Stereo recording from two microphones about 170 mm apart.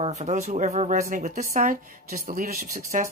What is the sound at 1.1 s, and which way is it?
A woman's voice, 55° right (ahead or behind).